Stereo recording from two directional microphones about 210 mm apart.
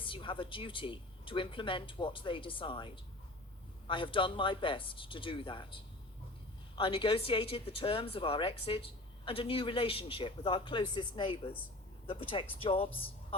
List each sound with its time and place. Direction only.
0.0 s speech: 25° left (ahead or behind)